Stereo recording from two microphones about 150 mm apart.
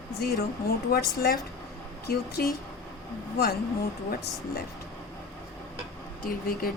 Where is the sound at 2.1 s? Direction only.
90° left.